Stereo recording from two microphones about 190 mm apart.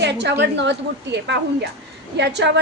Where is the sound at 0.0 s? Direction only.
65° right (ahead or behind).